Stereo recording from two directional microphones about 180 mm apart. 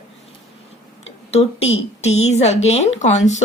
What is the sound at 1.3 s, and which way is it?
Speech, 35° left (ahead or behind).